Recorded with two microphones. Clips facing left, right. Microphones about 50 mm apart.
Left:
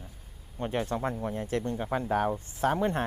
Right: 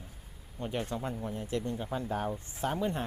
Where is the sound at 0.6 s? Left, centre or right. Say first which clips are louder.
Left 5 dB; left.